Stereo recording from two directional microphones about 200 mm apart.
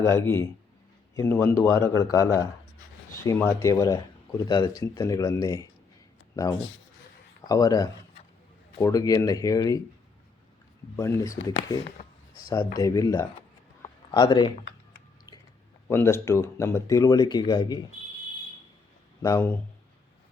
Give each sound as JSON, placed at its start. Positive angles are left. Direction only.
{"t": 0.0, "sound": "speech", "side_deg": 15}
{"t": 10.9, "sound": "speech", "side_deg": 15}
{"t": 12.5, "sound": "speech", "side_deg": 15}
{"t": 15.9, "sound": "speech", "side_deg": 10}
{"t": 19.2, "sound": "speech", "side_deg": 15}